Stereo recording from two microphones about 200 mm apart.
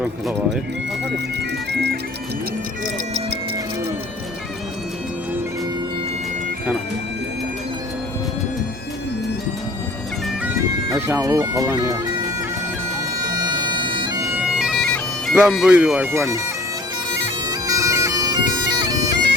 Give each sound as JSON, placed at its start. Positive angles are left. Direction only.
{"t": 0.0, "sound": "speech", "side_deg": 0}
{"t": 2.8, "sound": "music", "side_deg": -35}
{"t": 10.9, "sound": "speech", "side_deg": -15}
{"t": 13.2, "sound": "bagpipes", "side_deg": -20}
{"t": 14.4, "sound": "bagpipes", "side_deg": 0}
{"t": 17.5, "sound": "bagpipes", "side_deg": -15}